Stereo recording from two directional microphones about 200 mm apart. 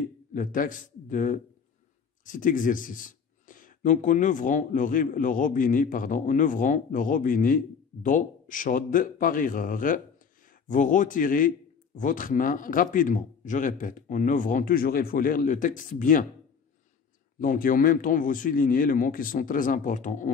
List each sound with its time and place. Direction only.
0.3 s a man's voice: 40° left (ahead or behind)
17.4 s speech: 45° left (ahead or behind)